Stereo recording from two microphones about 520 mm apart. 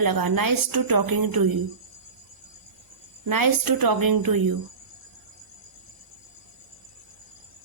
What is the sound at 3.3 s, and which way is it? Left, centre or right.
A woman's voice, right.